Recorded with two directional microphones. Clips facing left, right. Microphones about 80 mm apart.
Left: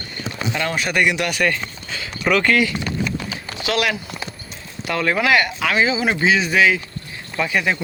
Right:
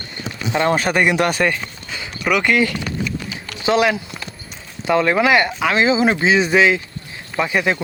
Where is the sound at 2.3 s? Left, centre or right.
Centre.